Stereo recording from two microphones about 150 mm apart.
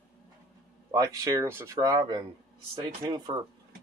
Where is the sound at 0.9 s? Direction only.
25° right (ahead or behind).